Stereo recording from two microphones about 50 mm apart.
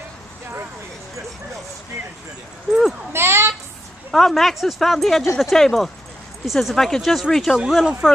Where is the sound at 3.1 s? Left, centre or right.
Right.